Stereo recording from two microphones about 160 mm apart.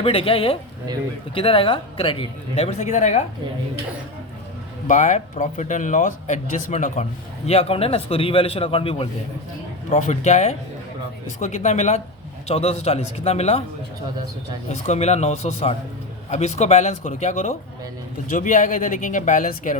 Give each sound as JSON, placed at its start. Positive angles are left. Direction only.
{"t": 0.0, "sound": "speech", "side_deg": 35}
{"t": 2.6, "sound": "speech", "side_deg": 45}
{"t": 4.9, "sound": "speech", "side_deg": 50}
{"t": 14.7, "sound": "speech", "side_deg": 45}